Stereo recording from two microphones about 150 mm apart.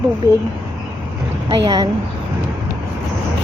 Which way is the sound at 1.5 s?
30° right (ahead or behind).